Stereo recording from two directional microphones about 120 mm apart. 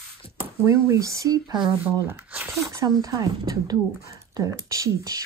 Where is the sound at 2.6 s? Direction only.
30° right (ahead or behind).